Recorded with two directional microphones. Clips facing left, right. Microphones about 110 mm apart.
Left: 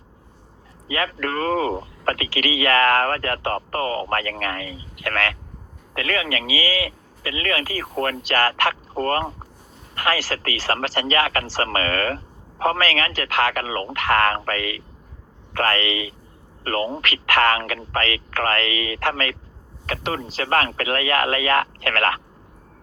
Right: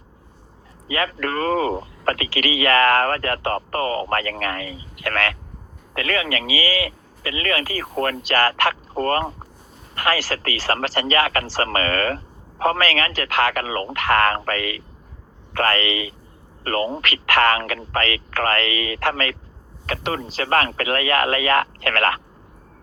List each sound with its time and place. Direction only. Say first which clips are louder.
0.9 s speech: right 1 dB; 50° right (ahead or behind)